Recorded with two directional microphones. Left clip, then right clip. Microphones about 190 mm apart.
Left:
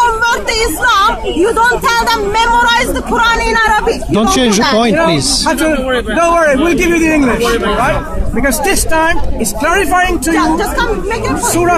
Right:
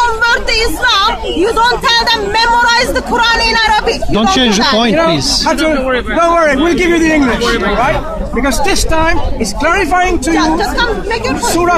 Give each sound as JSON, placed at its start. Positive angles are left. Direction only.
{"t": 0.0, "sound": "a woman's voice", "side_deg": -5}
{"t": 4.1, "sound": "a man's voice", "side_deg": 10}
{"t": 7.4, "sound": "speech", "side_deg": -40}
{"t": 8.5, "sound": "a man's voice", "side_deg": 20}
{"t": 10.3, "sound": "speech", "side_deg": -10}